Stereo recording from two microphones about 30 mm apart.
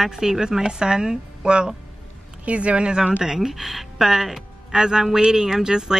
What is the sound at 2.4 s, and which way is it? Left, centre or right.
Speech, right.